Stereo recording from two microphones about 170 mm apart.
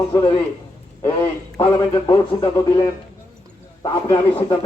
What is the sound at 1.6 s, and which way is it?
Speech, 30° left (ahead or behind).